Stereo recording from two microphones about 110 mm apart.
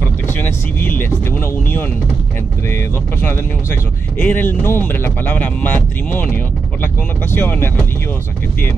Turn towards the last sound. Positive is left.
turn(degrees=15)  # may be behind; listen again after turning